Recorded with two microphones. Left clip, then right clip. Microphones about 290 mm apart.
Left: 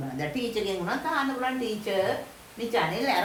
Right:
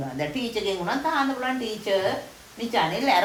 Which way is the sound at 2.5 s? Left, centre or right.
Centre.